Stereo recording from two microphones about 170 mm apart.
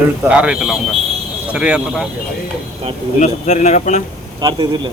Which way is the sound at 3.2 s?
45° left (ahead or behind).